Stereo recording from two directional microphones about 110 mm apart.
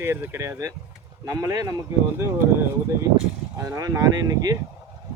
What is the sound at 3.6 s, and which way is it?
Speech, 30° right (ahead or behind).